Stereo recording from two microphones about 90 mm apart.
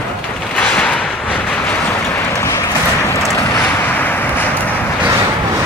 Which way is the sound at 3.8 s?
20° left (ahead or behind).